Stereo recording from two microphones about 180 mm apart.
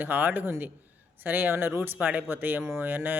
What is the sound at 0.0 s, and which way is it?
Speech, 10° right (ahead or behind).